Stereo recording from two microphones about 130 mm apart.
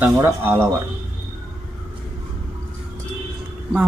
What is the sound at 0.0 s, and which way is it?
Speech, 20° right (ahead or behind).